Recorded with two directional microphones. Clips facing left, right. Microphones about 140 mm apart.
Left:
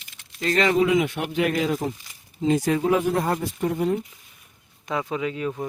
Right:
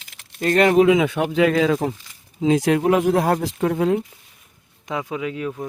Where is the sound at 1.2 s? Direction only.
90° right.